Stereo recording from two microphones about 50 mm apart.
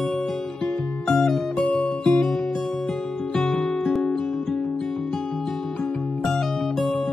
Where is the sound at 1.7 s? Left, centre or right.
Left.